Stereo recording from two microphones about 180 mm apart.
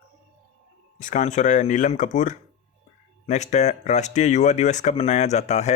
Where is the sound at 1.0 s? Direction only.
45° left (ahead or behind).